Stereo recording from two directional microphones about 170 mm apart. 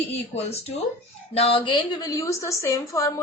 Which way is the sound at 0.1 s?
40° left (ahead or behind).